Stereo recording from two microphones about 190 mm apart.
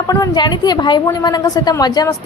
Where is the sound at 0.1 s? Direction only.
20° left (ahead or behind).